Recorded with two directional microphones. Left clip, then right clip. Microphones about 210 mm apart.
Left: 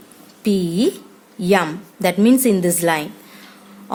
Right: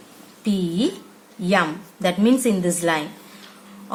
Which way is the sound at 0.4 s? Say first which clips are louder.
Left 5 dB; 40° left (ahead or behind).